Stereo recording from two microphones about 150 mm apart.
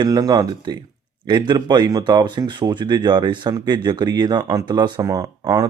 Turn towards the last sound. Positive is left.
turn(degrees=-25)  # may be behind; listen again after turning